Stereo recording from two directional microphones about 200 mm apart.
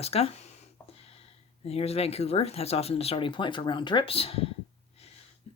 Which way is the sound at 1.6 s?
30° left (ahead or behind).